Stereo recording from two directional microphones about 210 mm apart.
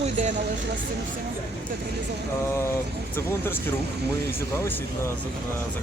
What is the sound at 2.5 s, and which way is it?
Speech, 10° left (ahead or behind).